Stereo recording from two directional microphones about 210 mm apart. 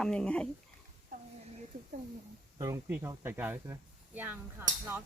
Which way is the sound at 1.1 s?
40° right (ahead or behind).